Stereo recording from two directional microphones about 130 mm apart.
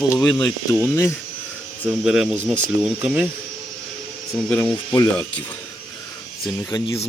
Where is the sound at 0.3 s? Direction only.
30° left (ahead or behind).